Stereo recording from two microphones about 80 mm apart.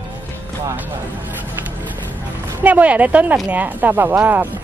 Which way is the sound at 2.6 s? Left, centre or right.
Centre.